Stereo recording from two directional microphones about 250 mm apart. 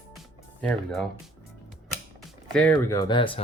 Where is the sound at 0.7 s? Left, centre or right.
Centre.